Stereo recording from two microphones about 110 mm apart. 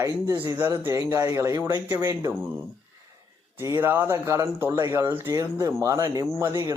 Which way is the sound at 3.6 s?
25° right (ahead or behind).